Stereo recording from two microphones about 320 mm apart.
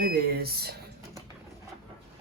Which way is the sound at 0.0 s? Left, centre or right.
Right.